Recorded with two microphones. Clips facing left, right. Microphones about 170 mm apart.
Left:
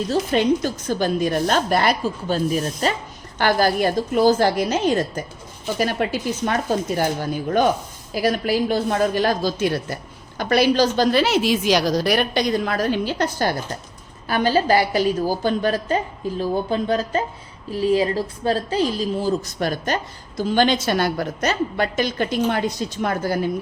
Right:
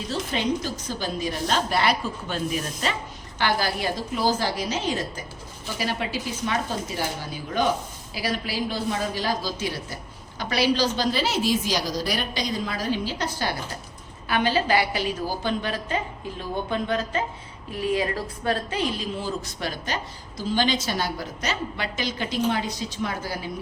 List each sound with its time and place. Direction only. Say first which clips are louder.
0.1 s a woman's voice: left 7 dB; 50° left (ahead or behind)
14.3 s a woman's voice: left 4 dB; 40° left (ahead or behind)